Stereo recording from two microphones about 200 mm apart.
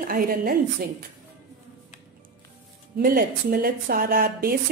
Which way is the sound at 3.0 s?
45° right (ahead or behind).